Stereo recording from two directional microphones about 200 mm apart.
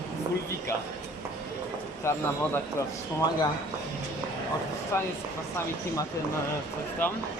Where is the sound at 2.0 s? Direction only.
15° left (ahead or behind).